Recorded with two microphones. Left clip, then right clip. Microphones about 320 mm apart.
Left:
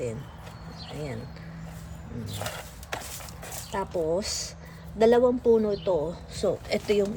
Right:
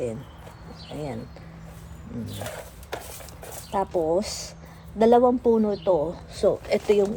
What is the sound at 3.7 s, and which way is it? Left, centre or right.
A man's voice, centre.